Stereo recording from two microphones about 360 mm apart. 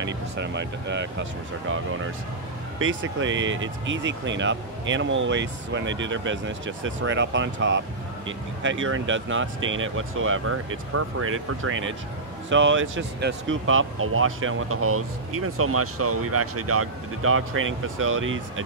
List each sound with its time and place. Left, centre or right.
0.0 s speech: right